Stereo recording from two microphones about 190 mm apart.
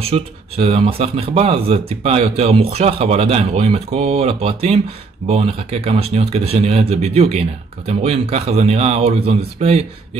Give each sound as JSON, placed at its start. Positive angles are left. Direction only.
{"t": 0.0, "sound": "speech", "side_deg": -30}